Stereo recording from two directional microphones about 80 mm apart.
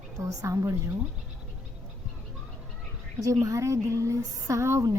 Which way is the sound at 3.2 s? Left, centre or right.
Right.